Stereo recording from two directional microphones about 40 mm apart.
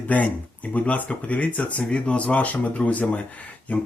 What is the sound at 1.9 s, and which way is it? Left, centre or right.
Speech, left.